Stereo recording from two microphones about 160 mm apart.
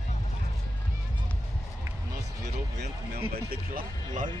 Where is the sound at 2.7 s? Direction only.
90° right.